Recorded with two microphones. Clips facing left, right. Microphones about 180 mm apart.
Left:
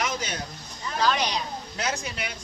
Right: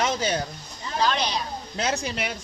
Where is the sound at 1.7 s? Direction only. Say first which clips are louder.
Right 5 dB; 30° right (ahead or behind).